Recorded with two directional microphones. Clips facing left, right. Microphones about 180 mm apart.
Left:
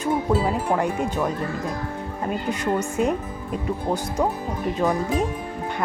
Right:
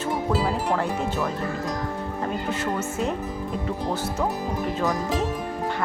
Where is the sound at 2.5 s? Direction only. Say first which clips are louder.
Left 3 dB; 15° left (ahead or behind).